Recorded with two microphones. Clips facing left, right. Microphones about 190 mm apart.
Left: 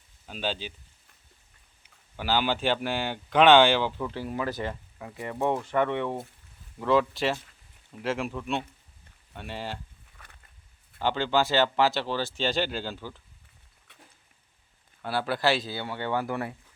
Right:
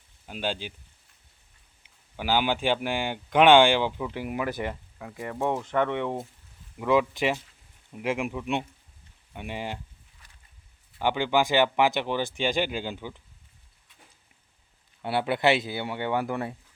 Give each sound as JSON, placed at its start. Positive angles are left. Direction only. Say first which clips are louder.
{"t": 0.3, "sound": "speech", "louder": "right 1 dB", "side_deg": -10}
{"t": 2.1, "sound": "speech", "louder": "right 1 dB", "side_deg": -10}
{"t": 5.6, "sound": "speech", "louder": "even", "side_deg": 10}
{"t": 5.9, "sound": "speech", "louder": "even", "side_deg": -15}
{"t": 10.2, "sound": "a sound", "louder": "left 8 dB", "side_deg": 60}
{"t": 11.0, "sound": "speech", "louder": "right 1 dB", "side_deg": -15}
{"t": 15.0, "sound": "speech", "louder": "right 3 dB", "side_deg": -20}